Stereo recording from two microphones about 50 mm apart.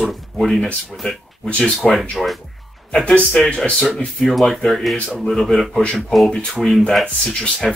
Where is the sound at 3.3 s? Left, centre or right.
Centre.